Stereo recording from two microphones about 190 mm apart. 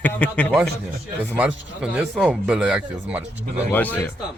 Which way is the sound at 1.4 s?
5° right (ahead or behind).